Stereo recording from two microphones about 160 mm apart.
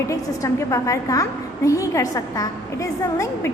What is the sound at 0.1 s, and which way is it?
A woman's voice, 20° left (ahead or behind).